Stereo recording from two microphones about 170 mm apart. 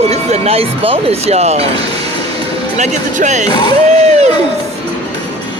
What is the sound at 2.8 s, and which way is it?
Speech, 45° right (ahead or behind).